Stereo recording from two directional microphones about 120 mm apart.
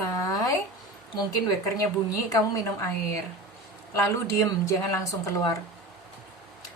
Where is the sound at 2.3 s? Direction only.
25° left (ahead or behind).